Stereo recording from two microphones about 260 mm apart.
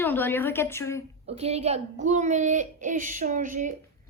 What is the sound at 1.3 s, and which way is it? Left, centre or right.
A child's voice, right.